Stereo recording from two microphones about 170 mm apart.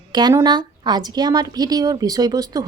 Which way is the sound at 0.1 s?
25° right (ahead or behind).